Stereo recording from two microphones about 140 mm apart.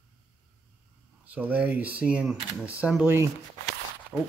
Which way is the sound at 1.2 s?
10° right (ahead or behind).